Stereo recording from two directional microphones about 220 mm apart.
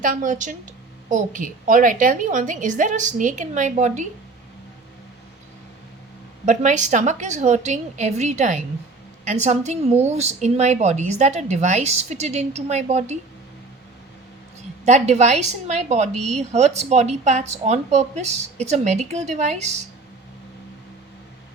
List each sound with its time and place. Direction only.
0.0 s a woman's voice: 35° right (ahead or behind)
6.4 s a woman's voice: 35° right (ahead or behind)
14.8 s a woman's voice: 30° right (ahead or behind)